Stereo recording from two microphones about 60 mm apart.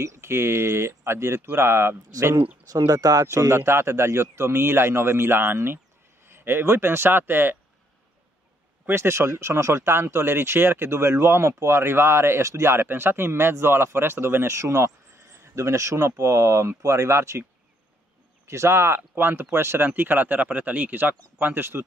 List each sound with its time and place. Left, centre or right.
0.0 s speech: right
2.7 s speech: right
3.3 s speech: right
8.8 s speech: right
18.5 s speech: right
19.9 s speech: right